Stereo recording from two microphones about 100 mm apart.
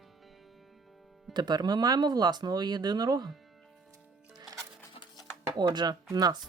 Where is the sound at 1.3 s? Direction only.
45° right (ahead or behind).